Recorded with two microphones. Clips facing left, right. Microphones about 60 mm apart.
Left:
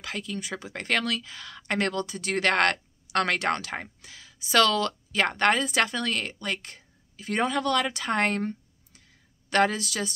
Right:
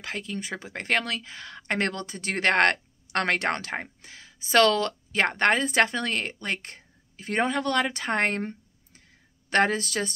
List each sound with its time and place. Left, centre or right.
0.0 s speech: right